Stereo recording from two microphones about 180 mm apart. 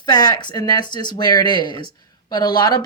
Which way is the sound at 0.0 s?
20° left (ahead or behind).